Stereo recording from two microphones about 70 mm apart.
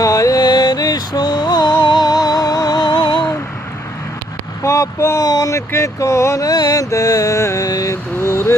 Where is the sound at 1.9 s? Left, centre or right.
Left.